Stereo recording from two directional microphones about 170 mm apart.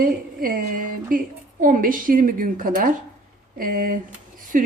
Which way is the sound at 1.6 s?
55° right (ahead or behind).